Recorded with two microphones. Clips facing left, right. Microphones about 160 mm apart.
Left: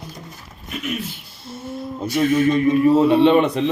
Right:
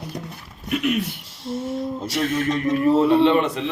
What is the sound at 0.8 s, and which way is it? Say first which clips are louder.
Speech: right 3 dB; 65° right (ahead or behind).